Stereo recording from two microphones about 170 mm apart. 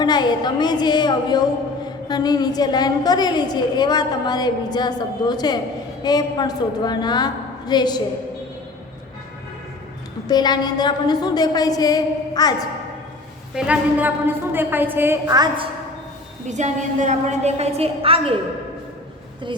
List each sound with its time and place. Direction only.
0.0 s a woman's voice: 25° left (ahead or behind)
10.2 s a woman's voice: 25° left (ahead or behind)
13.6 s a woman's voice: 10° right (ahead or behind); by 15.7 s 25° right (ahead or behind)
16.5 s a woman's voice: 45° right (ahead or behind)